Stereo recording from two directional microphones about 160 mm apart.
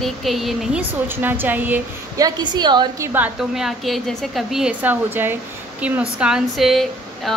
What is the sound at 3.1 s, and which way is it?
A woman's voice, 5° right (ahead or behind).